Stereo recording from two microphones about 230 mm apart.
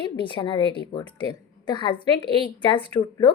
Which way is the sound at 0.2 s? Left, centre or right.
Left.